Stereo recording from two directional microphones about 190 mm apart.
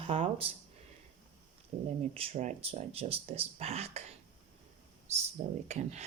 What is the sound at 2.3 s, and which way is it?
Speech, 40° right (ahead or behind).